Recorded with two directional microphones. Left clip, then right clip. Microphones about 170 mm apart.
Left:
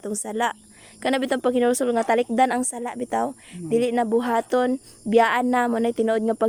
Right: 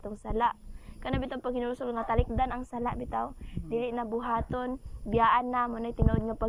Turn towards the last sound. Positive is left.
turn(degrees=45)  # may be behind; listen again after turning